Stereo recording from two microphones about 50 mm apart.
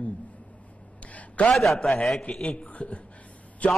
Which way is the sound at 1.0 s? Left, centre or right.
Left.